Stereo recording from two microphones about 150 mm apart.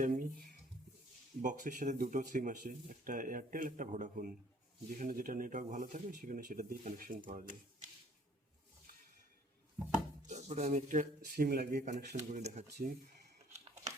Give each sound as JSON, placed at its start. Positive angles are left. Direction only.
{"t": 0.0, "sound": "speech", "side_deg": -65}
{"t": 10.2, "sound": "speech", "side_deg": -50}
{"t": 12.1, "sound": "speech", "side_deg": -50}